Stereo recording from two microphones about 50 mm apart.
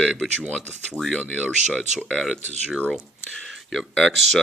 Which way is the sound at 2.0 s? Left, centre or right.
Centre.